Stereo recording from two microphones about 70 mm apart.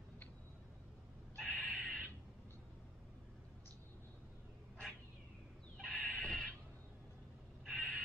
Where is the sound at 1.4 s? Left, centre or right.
Centre.